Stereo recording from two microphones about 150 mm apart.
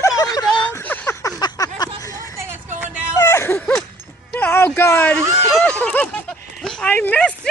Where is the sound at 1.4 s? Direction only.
25° left (ahead or behind).